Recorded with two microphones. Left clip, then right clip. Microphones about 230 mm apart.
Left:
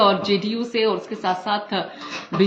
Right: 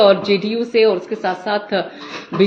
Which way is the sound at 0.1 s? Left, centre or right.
Centre.